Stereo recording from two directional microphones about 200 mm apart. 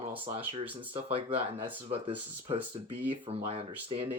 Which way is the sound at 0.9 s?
25° right (ahead or behind).